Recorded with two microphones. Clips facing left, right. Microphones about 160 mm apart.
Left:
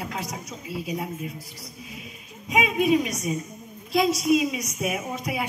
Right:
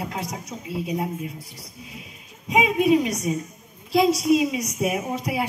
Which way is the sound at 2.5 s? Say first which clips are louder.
Right 3 dB; 30° right (ahead or behind).